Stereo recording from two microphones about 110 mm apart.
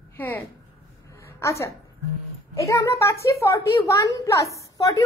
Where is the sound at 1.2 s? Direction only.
25° left (ahead or behind).